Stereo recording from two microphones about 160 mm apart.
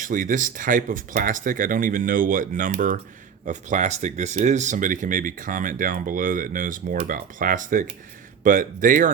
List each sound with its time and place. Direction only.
0.0 s speech: 55° right (ahead or behind)